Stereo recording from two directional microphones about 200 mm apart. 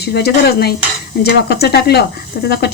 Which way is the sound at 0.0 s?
55° left (ahead or behind).